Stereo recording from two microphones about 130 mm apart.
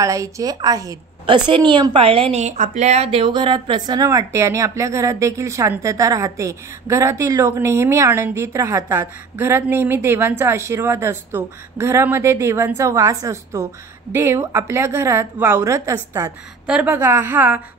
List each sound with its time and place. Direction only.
0.0 s a woman's voice: 25° right (ahead or behind); by 2.4 s 45° right (ahead or behind)
2.4 s speech: 70° right (ahead or behind); by 16.3 s 20° right (ahead or behind)
16.6 s a woman's voice: 10° right (ahead or behind)
16.9 s a woman's voice: 20° right (ahead or behind)